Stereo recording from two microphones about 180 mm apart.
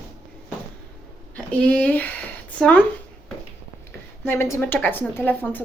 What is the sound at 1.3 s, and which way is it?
A woman's voice, 5° left (ahead or behind).